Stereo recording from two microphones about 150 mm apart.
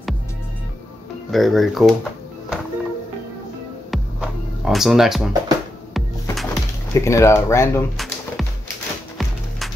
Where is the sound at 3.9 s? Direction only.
Centre (ahead or behind).